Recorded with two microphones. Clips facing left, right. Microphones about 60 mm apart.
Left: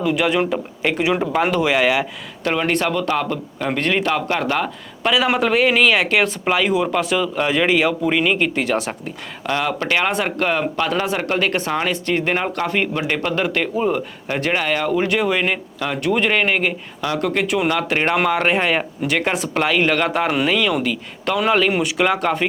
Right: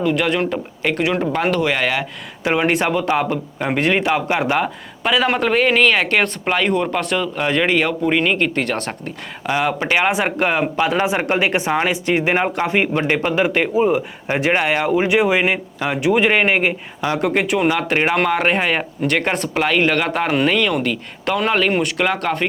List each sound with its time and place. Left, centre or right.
0.0 s speech: centre
2.4 s speech: centre
5.0 s speech: centre
9.5 s speech: centre